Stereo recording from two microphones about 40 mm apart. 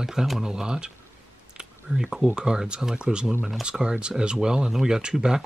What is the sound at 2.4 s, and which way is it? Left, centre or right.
Speech, right.